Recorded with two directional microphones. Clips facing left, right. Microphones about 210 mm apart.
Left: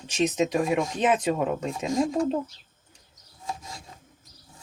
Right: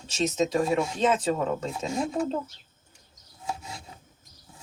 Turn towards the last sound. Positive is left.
turn(degrees=-10)  # may be behind; listen again after turning